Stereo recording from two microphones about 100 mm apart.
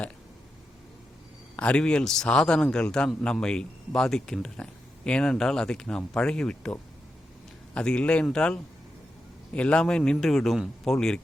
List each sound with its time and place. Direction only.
1.5 s a man's voice: 10° left (ahead or behind)